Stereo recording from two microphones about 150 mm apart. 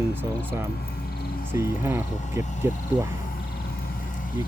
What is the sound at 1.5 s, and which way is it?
Speech, 15° right (ahead or behind).